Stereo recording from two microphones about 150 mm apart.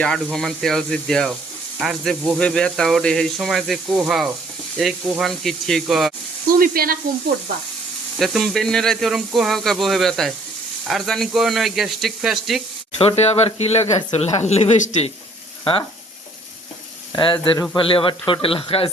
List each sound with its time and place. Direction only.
0.3 s speech: centre (ahead or behind)
6.5 s speech: 75° right (ahead or behind)
8.2 s speech: centre (ahead or behind)
13.0 s speech: 40° left (ahead or behind)
17.2 s a man's voice: 35° left (ahead or behind)